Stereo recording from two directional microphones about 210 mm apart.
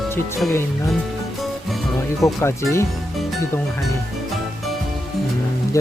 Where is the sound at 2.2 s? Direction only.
15° left (ahead or behind).